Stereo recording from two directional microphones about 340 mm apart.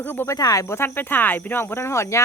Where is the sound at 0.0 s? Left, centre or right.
Centre.